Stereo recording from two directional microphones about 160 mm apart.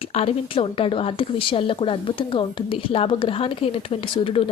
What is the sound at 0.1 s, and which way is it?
Speech, 40° left (ahead or behind).